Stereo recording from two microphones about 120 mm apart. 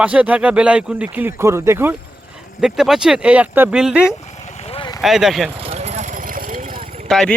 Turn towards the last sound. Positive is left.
turn(degrees=5)  # may be behind; listen again after turning